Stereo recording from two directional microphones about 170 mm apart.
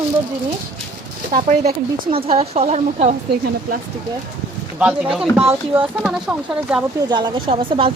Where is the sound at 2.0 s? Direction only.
35° right (ahead or behind).